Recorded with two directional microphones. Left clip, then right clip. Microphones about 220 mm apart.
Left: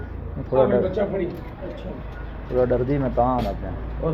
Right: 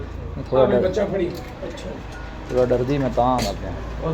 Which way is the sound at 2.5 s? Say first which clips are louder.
Right 2 dB; 15° right (ahead or behind).